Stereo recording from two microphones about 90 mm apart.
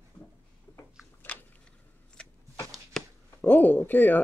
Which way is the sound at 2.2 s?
10° left (ahead or behind).